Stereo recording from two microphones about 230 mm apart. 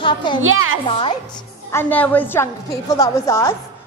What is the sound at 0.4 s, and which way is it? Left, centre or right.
Speech, right.